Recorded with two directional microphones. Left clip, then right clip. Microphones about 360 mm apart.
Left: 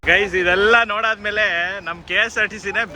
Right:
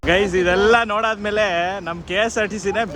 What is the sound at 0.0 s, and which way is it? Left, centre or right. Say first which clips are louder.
Speech: left 1 dB; centre.